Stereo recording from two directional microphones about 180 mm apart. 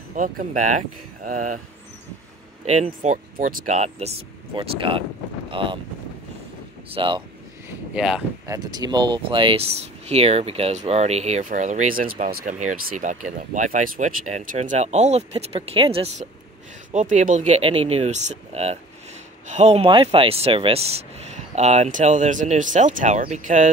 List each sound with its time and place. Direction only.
0.1 s speech: 45° right (ahead or behind)
2.6 s speech: 40° right (ahead or behind)
4.6 s speech: 30° right (ahead or behind)
6.9 s speech: 30° right (ahead or behind)
7.9 s speech: 5° right (ahead or behind)
8.5 s speech: 20° right (ahead or behind)
16.9 s speech: 45° right (ahead or behind)